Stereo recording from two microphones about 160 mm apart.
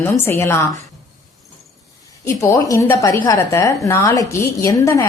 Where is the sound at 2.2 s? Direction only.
20° left (ahead or behind).